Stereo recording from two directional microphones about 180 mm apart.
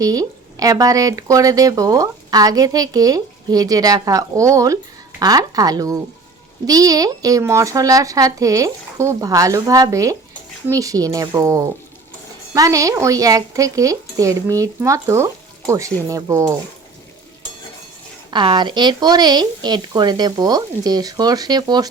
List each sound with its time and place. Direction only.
0.0 s speech: 20° right (ahead or behind)
18.3 s speech: 25° right (ahead or behind)